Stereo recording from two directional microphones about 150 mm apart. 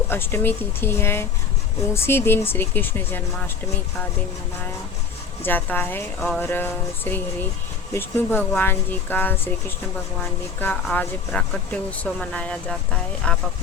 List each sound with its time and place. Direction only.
0.1 s speech: 15° left (ahead or behind)
5.4 s speech: 10° left (ahead or behind)
6.1 s music: centre (ahead or behind)
6.4 s speech: 15° left (ahead or behind)
10.9 s speech: 10° left (ahead or behind)